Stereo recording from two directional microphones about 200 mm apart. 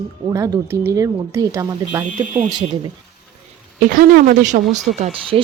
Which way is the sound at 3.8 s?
45° right (ahead or behind).